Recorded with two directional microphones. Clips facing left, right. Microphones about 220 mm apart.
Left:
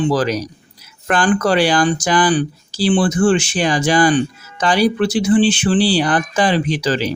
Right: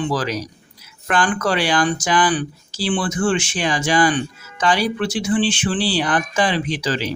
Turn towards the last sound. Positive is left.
turn(degrees=40)  # may be behind; listen again after turning